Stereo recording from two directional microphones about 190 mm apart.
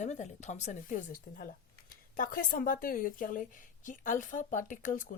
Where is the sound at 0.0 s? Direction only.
40° left (ahead or behind).